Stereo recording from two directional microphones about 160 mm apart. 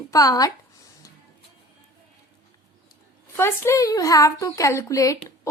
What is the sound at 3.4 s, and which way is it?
A woman's voice, 15° left (ahead or behind).